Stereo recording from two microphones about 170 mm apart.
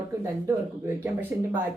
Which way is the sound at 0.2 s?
15° right (ahead or behind).